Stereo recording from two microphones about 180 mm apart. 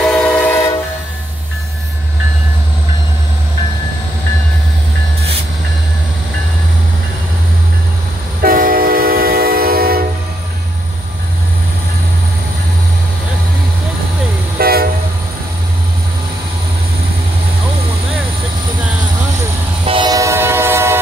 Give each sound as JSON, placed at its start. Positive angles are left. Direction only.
{"t": 0.0, "sound": "train", "side_deg": 5}
{"t": 8.4, "sound": "train", "side_deg": -55}
{"t": 14.6, "sound": "train", "side_deg": -55}
{"t": 19.9, "sound": "train", "side_deg": -25}